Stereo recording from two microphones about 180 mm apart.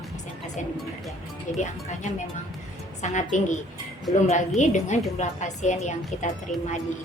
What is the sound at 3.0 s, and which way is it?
A woman's voice, 40° left (ahead or behind).